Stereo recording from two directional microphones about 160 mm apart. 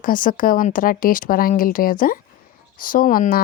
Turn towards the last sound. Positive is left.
turn(degrees=60)  # may be behind; listen again after turning